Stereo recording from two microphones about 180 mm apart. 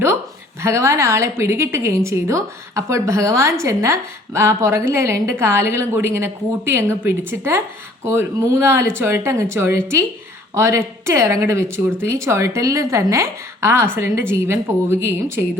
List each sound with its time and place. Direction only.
0.6 s speech: 15° right (ahead or behind)